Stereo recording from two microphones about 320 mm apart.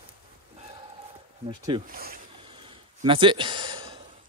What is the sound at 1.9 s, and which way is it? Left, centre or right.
Speech, right.